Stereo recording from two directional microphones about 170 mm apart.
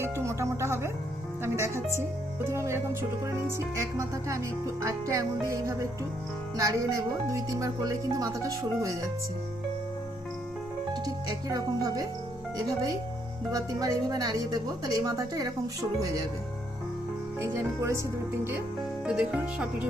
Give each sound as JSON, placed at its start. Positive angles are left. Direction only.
{"t": 0.0, "sound": "music", "side_deg": -15}
{"t": 6.6, "sound": "speech", "side_deg": -20}
{"t": 10.9, "sound": "speech", "side_deg": -20}
{"t": 13.5, "sound": "speech", "side_deg": -20}
{"t": 17.4, "sound": "music", "side_deg": -15}
{"t": 19.0, "sound": "music", "side_deg": -5}